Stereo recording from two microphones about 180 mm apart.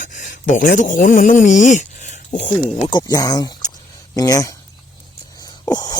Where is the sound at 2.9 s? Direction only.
20° left (ahead or behind).